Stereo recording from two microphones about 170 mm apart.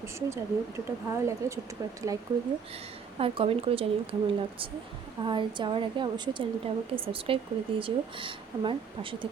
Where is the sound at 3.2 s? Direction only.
35° right (ahead or behind).